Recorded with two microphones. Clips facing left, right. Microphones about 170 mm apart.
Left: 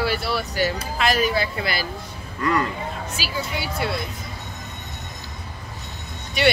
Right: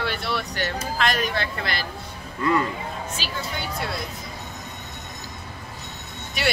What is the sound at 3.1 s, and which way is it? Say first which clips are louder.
Speech: left 3 dB; 5° left (ahead or behind).